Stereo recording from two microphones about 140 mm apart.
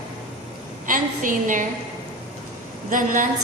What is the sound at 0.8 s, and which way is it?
Speech, 70° right (ahead or behind).